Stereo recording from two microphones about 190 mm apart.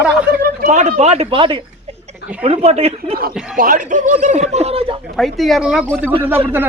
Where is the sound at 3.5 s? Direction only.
45° right (ahead or behind); by 5.0 s 30° right (ahead or behind).